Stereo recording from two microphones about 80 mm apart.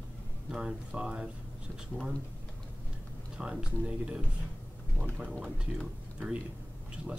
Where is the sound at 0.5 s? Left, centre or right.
Centre.